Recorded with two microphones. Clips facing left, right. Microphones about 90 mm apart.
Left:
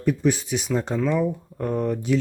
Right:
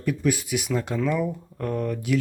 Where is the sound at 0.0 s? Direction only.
25° left (ahead or behind).